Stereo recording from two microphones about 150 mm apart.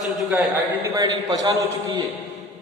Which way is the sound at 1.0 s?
25° right (ahead or behind).